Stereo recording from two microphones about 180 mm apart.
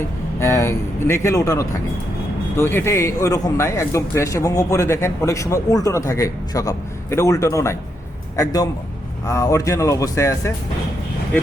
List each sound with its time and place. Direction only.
0.3 s a man's voice: 15° left (ahead or behind)